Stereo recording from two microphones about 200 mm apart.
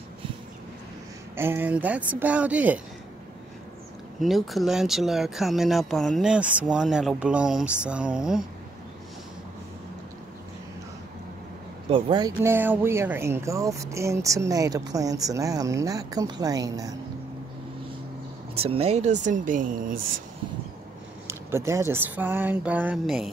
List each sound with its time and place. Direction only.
1.3 s speech: 10° right (ahead or behind)
4.2 s speech: centre (ahead or behind)
11.9 s speech: 20° right (ahead or behind)
18.5 s speech: 30° right (ahead or behind)
21.3 s speech: 15° right (ahead or behind)